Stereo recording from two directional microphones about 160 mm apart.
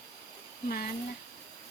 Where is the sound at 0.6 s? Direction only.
70° left (ahead or behind).